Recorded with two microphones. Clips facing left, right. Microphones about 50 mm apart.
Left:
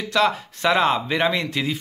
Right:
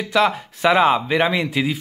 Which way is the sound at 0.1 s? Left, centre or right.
Centre.